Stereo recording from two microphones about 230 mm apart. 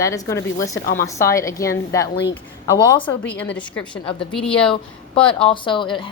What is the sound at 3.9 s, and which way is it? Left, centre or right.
Speech, left.